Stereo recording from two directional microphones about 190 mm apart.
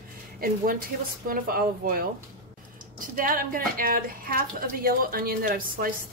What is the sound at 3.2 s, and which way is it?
A woman's voice, 50° right (ahead or behind).